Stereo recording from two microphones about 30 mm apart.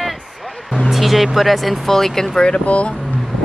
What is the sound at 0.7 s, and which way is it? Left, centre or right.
Speech, centre.